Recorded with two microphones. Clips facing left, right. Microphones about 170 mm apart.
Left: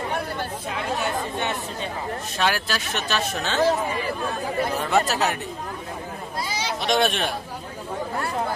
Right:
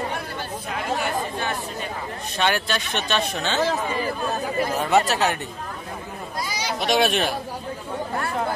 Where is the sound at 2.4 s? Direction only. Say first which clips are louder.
Right 2 dB; centre (ahead or behind).